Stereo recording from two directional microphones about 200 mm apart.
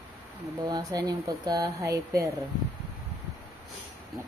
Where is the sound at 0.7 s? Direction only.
20° right (ahead or behind).